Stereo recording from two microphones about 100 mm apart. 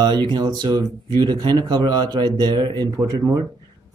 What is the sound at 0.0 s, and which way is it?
Speech, 45° right (ahead or behind).